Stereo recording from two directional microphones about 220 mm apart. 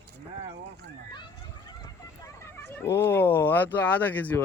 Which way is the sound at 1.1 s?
20° left (ahead or behind).